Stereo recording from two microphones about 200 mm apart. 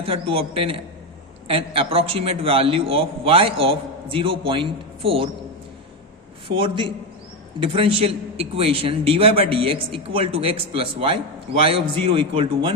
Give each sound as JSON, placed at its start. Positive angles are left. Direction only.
{"t": 0.0, "sound": "a man's voice", "side_deg": -30}
{"t": 6.5, "sound": "a man's voice", "side_deg": -25}